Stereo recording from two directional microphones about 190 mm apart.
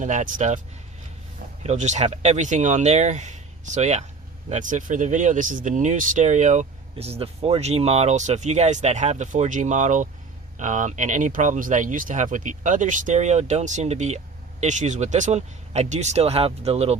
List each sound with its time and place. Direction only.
0.0 s speech: 40° right (ahead or behind)
1.6 s speech: 40° right (ahead or behind)